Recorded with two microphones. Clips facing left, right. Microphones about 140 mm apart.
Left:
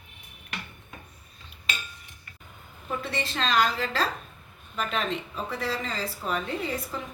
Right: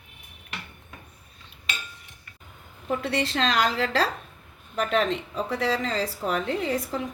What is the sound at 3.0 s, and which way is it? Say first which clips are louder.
A woman's voice: right 4 dB; 85° right.